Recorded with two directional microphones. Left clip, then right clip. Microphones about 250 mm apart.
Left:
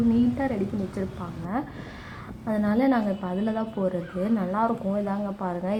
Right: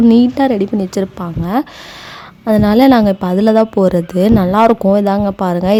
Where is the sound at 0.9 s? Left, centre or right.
Right.